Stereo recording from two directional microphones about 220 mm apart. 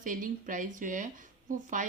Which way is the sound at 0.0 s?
35° right (ahead or behind).